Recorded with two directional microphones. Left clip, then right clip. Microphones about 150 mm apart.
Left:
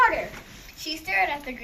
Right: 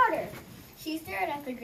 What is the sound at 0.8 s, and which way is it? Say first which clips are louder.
Speech: left 8 dB; 15° right (ahead or behind).